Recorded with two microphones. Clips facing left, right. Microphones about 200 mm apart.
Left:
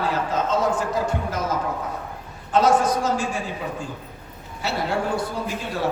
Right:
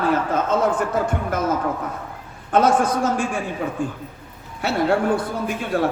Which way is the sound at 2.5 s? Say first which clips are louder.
Right 2 dB; 55° right (ahead or behind).